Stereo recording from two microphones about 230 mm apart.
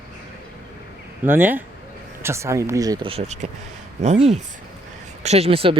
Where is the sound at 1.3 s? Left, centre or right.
Centre.